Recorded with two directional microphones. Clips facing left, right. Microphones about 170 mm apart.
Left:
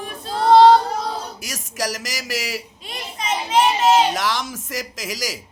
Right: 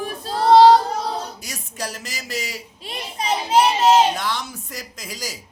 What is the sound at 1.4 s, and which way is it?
Speech, 90° left.